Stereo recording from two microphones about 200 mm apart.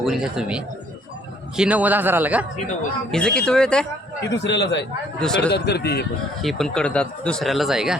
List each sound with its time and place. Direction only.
0.0 s a man's voice: 5° right (ahead or behind)
3.1 s speech: 5° left (ahead or behind)
4.3 s a man's voice: 60° left (ahead or behind)
6.4 s speech: centre (ahead or behind)